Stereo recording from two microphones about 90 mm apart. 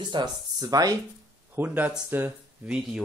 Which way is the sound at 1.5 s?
20° right (ahead or behind).